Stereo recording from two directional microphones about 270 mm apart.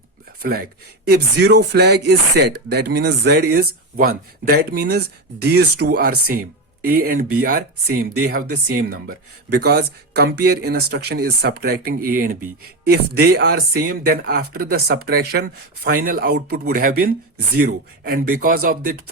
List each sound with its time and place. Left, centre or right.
0.4 s speech: right